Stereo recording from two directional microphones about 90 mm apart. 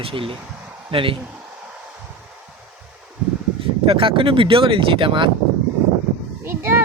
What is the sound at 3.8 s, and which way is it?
Speech, 80° right.